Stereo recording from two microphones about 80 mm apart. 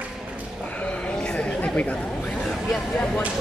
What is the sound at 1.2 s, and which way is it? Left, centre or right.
Chatter, centre.